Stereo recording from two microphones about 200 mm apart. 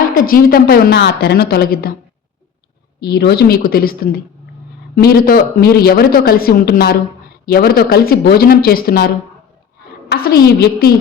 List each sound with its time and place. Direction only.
0.0 s speech: 45° left (ahead or behind)
3.0 s speech: 55° left (ahead or behind)
10.1 s speech: 50° left (ahead or behind)